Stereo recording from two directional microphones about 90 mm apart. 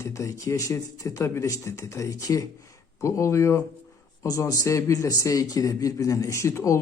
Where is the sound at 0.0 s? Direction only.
35° left (ahead or behind).